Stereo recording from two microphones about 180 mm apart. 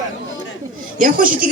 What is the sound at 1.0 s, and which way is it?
Speech, 50° right (ahead or behind).